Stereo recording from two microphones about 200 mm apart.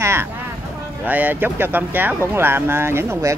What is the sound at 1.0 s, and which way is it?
Speech, 10° right (ahead or behind).